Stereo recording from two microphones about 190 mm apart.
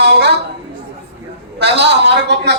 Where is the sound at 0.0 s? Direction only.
65° right (ahead or behind).